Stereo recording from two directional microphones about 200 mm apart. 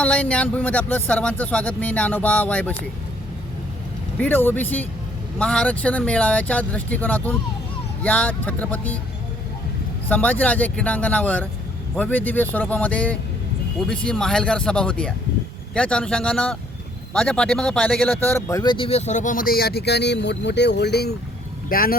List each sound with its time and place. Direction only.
0.0 s speech: 5° left (ahead or behind)
4.2 s speech: 10° left (ahead or behind)
10.1 s speech: 10° left (ahead or behind); by 21.9 s 45° left (ahead or behind)